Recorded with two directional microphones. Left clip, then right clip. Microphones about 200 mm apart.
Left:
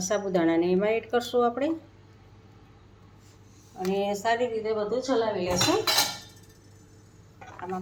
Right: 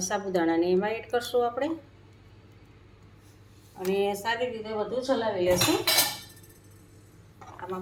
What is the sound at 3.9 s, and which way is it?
A woman's voice, 50° left (ahead or behind).